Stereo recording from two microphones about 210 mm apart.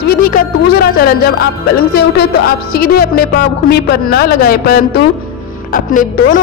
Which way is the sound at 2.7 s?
45° left (ahead or behind).